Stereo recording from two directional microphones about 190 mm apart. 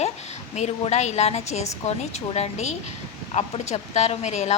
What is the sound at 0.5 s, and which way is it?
A woman's voice, 35° left (ahead or behind).